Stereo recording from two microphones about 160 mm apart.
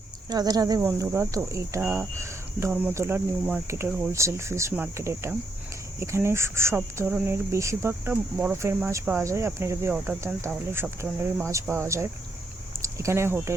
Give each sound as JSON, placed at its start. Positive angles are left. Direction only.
{"t": 0.3, "sound": "speech", "side_deg": -25}